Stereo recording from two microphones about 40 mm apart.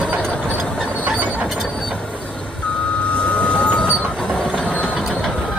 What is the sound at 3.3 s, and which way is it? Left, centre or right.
Train, left.